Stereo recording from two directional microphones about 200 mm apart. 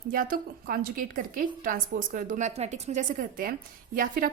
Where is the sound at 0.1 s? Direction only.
45° right (ahead or behind).